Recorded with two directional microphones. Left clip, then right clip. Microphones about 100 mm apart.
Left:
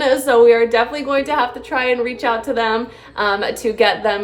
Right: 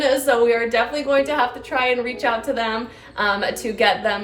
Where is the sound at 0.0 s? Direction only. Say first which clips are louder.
Left 5 dB; 40° left (ahead or behind).